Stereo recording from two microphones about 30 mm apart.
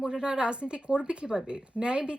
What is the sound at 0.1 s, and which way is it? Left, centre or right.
Speech, right.